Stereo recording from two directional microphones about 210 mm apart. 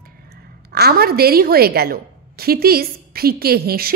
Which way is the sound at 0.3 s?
50° right (ahead or behind).